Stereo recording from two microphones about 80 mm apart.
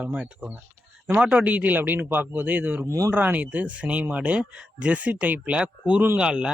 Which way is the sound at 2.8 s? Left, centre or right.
Right.